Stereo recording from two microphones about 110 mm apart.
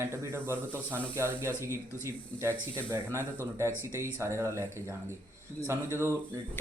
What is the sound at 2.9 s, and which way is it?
Speech, 25° right (ahead or behind).